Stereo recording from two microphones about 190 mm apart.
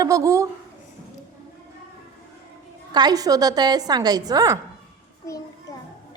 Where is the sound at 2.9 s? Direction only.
20° right (ahead or behind).